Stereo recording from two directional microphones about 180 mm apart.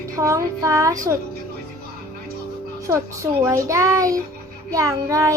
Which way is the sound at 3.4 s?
15° right (ahead or behind).